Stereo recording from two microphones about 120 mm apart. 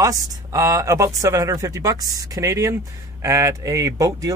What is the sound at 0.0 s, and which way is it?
Speech, 30° right (ahead or behind).